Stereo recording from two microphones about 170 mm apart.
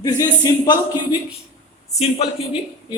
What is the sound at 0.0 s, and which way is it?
Speech, 20° left (ahead or behind).